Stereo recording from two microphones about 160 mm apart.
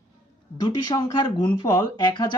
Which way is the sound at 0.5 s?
25° left (ahead or behind).